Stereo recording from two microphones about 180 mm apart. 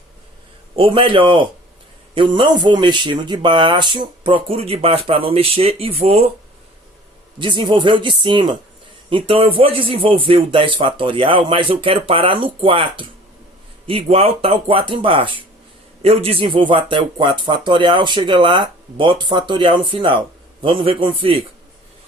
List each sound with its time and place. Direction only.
0.8 s speech: 30° right (ahead or behind)
7.3 s speech: 25° right (ahead or behind)